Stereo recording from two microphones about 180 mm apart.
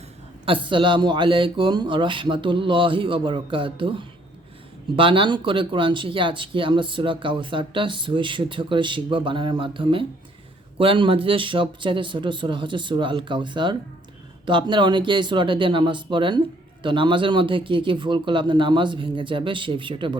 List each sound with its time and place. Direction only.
0.4 s speech: 30° right (ahead or behind)
4.9 s speech: 30° right (ahead or behind)